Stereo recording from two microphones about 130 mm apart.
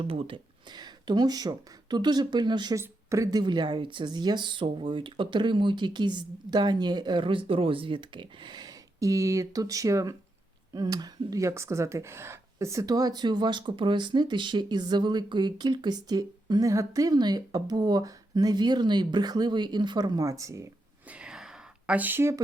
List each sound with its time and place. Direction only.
0.0 s speech: 45° right (ahead or behind)
2.7 s speech: 20° right (ahead or behind)
21.1 s a sound: 5° right (ahead or behind)